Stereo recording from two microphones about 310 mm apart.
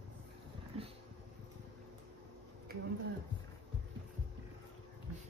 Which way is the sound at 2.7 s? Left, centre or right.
Right.